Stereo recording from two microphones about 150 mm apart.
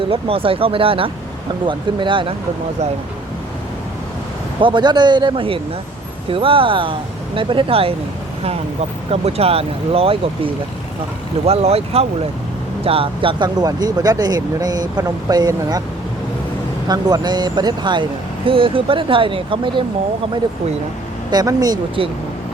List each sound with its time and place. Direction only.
0.1 s speech: 40° right (ahead or behind)
4.6 s speech: 30° right (ahead or behind)
9.0 s speech: 40° right (ahead or behind); by 15.8 s 25° right (ahead or behind)
16.9 s speech: 30° right (ahead or behind)
21.2 s speech: 25° right (ahead or behind)